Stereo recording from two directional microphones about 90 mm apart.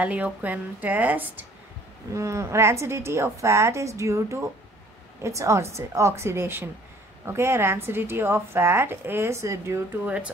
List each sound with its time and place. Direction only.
0.0 s a woman's voice: 15° right (ahead or behind)
2.1 s a woman's voice: 35° right (ahead or behind)
10.0 s speech: 15° right (ahead or behind)